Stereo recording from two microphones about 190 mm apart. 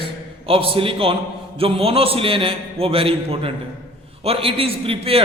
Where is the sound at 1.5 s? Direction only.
30° right (ahead or behind).